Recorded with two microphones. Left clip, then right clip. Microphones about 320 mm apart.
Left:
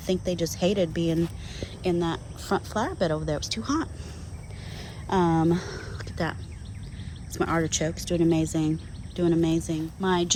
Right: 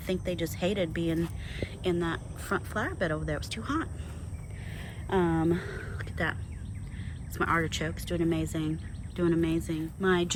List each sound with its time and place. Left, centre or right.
0.0 s speech: centre
4.8 s a sound: centre
7.3 s speech: centre